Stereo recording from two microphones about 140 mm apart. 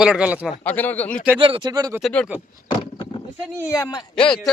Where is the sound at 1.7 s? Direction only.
25° right (ahead or behind).